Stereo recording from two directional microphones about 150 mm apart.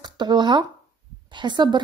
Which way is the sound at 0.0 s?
30° right (ahead or behind).